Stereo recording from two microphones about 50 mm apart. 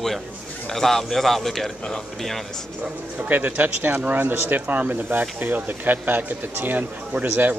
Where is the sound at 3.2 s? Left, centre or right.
Right.